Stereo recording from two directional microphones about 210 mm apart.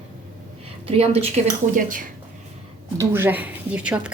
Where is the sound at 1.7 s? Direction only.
40° right (ahead or behind).